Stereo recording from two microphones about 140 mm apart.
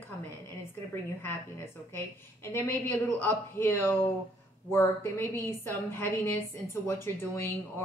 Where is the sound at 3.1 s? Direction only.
15° left (ahead or behind).